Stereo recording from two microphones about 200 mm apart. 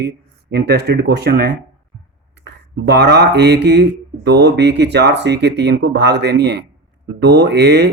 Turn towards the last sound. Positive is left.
turn(degrees=-55)  # may be behind; listen again after turning